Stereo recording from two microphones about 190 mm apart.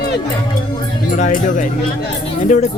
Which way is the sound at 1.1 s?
40° left (ahead or behind).